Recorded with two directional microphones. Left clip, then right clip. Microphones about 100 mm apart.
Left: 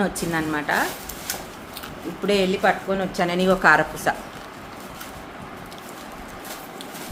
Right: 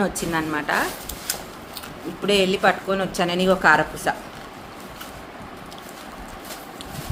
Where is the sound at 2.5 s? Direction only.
35° right (ahead or behind).